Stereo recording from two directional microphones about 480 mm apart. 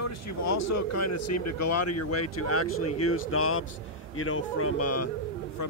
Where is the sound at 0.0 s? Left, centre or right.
Left.